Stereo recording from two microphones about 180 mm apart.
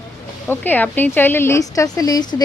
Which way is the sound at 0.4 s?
10° left (ahead or behind).